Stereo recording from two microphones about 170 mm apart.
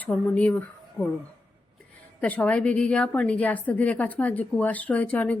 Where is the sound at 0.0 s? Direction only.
10° left (ahead or behind).